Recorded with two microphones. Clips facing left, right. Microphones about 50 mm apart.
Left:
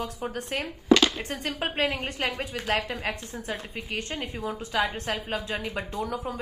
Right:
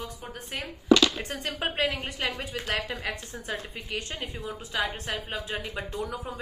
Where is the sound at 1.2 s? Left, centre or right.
Left.